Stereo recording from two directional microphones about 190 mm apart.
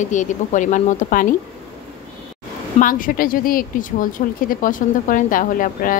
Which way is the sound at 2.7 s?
45° left (ahead or behind).